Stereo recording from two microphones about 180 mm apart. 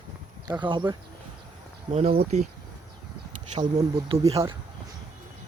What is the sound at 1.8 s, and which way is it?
Speech, 35° right (ahead or behind).